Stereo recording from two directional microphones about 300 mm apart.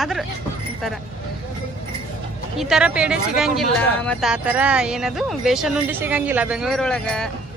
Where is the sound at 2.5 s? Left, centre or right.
Centre.